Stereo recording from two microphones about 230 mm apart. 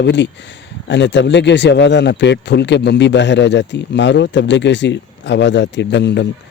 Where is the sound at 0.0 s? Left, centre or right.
Left.